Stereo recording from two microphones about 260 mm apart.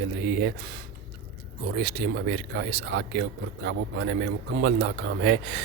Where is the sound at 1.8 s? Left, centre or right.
Right.